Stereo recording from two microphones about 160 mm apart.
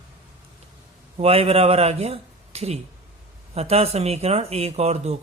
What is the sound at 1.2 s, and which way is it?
Speech, 40° right (ahead or behind).